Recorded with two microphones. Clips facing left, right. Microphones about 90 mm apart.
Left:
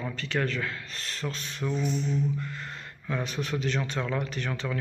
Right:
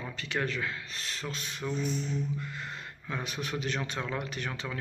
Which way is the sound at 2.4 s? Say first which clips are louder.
Left 2 dB; 15° right (ahead or behind).